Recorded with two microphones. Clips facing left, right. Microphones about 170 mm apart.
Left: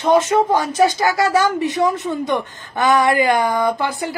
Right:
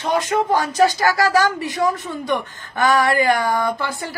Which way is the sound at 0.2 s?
20° left (ahead or behind).